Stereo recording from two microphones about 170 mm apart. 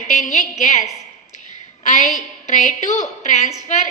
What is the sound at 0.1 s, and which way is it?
Speech, 45° left (ahead or behind).